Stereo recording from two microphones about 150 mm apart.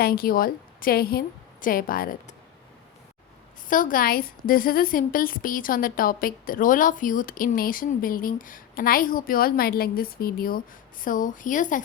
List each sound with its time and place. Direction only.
0.0 s a woman's voice: 80° left
1.6 s a woman's voice: 70° left (ahead or behind)
3.7 s a woman's voice: 65° left (ahead or behind); by 10.6 s 85° left
11.0 s speech: 60° left (ahead or behind)